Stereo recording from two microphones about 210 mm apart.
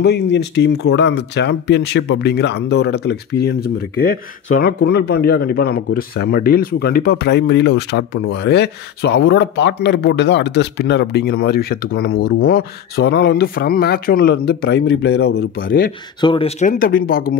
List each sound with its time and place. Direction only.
0.0 s speech: 55° left (ahead or behind)
16.2 s speech: 25° left (ahead or behind); by 17.4 s 45° left (ahead or behind)